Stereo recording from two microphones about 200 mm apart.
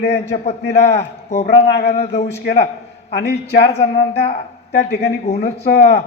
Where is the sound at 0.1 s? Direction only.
35° left (ahead or behind).